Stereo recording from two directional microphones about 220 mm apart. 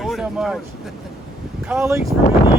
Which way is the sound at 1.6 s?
10° right (ahead or behind).